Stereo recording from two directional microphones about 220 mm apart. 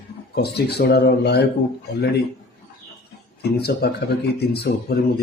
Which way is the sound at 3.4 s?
45° left (ahead or behind).